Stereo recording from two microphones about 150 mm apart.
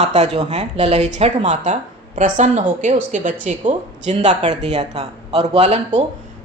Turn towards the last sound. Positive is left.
turn(degrees=-45)  # may be behind; listen again after turning